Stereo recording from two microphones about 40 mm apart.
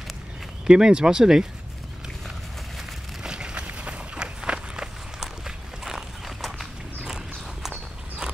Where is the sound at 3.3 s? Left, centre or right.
Right.